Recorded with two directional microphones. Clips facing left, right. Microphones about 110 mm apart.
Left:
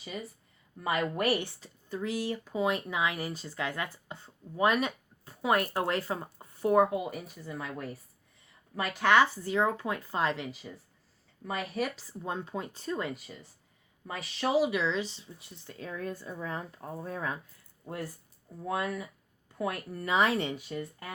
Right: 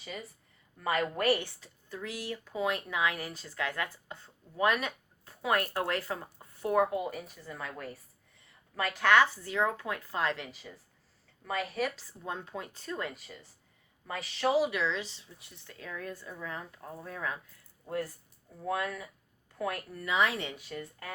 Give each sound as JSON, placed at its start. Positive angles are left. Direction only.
{"t": 0.8, "sound": "speech", "side_deg": 15}
{"t": 1.6, "sound": "speech", "side_deg": 25}
{"t": 6.9, "sound": "speech", "side_deg": 15}
{"t": 14.1, "sound": "speech", "side_deg": 15}
{"t": 18.6, "sound": "speech", "side_deg": 20}
{"t": 20.0, "sound": "speech", "side_deg": 35}
{"t": 20.7, "sound": "speech", "side_deg": 20}